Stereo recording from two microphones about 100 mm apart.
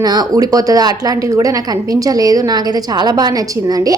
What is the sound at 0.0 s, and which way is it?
A woman's voice, 40° right (ahead or behind).